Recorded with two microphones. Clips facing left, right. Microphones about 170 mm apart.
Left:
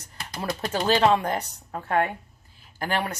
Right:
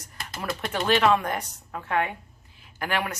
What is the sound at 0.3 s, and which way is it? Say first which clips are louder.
A woman's voice: left 2 dB; 25° left (ahead or behind).